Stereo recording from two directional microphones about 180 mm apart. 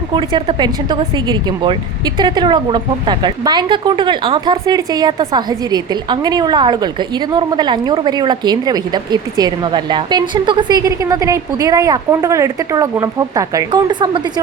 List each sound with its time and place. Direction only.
0.1 s a woman's voice: 25° right (ahead or behind)